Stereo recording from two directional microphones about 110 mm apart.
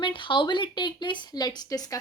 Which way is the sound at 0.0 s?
45° left (ahead or behind).